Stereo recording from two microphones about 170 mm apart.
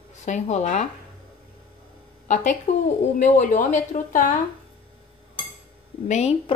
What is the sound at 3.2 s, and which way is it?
A woman's voice, 50° left (ahead or behind).